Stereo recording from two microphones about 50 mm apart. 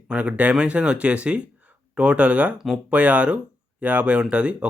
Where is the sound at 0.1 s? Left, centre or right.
Right.